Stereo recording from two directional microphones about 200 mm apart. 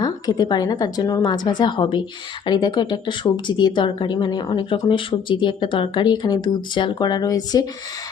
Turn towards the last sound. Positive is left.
turn(degrees=20)  # may be behind; listen again after turning